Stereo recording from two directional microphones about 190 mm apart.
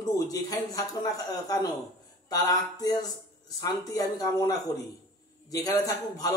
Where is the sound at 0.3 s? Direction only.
20° left (ahead or behind).